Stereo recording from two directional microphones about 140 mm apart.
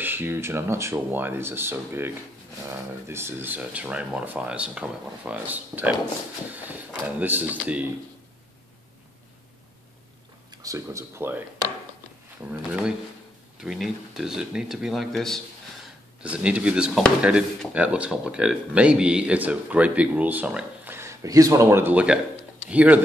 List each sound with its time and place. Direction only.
0.0 s speech: 15° right (ahead or behind)
10.6 s speech: 20° right (ahead or behind)
13.6 s speech: centre (ahead or behind)
16.2 s speech: 10° right (ahead or behind)